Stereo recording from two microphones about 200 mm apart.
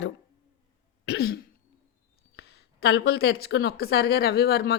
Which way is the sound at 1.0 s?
55° left (ahead or behind).